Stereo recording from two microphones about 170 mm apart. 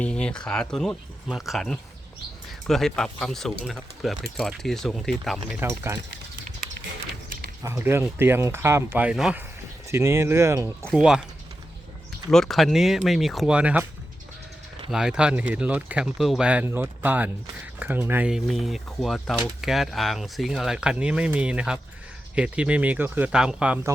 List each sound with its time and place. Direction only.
0.0 s speech: 5° left (ahead or behind)
5.5 s speech: 15° right (ahead or behind)
7.6 s speech: 15° right (ahead or behind)
9.9 s speech: 15° right (ahead or behind)
10.9 s speech: 5° right (ahead or behind)
12.3 s speech: centre (ahead or behind)
14.8 s speech: 5° right (ahead or behind)